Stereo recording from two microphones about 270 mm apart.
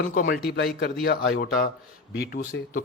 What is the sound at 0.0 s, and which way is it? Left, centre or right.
A man's voice, left.